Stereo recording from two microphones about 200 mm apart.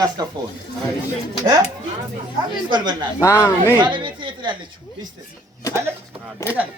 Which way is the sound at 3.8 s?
25° right (ahead or behind).